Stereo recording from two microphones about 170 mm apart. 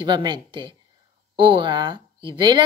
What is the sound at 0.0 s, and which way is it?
A woman's voice, 25° right (ahead or behind).